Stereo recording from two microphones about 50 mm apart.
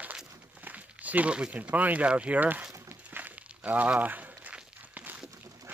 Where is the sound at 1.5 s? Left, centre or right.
Right.